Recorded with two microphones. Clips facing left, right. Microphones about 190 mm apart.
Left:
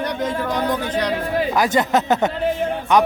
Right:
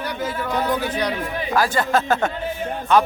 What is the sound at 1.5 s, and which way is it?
Speech, 20° left (ahead or behind).